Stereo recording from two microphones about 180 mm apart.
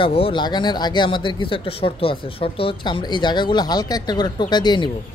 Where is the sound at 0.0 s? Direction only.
30° left (ahead or behind).